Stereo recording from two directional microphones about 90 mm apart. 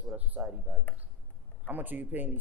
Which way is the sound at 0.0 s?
15° right (ahead or behind).